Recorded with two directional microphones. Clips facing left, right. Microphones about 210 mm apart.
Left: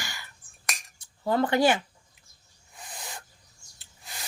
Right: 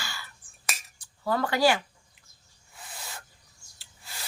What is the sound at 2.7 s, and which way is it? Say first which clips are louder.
Owl: left 2 dB; 15° left (ahead or behind).